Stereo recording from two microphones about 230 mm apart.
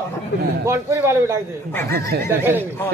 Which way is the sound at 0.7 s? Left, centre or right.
Centre.